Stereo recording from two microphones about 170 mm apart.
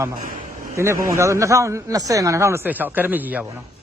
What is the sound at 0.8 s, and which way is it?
A man's voice, 15° right (ahead or behind).